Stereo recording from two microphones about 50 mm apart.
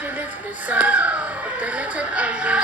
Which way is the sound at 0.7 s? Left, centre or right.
Right.